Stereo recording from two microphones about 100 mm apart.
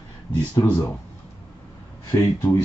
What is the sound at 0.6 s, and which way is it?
Speech, 25° left (ahead or behind).